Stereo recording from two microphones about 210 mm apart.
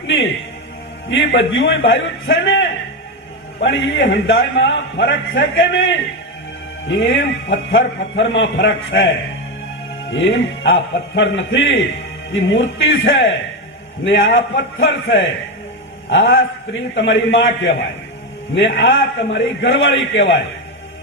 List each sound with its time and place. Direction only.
1.1 s a man's voice: 60° left (ahead or behind)
10.1 s a man's voice: 60° left (ahead or behind)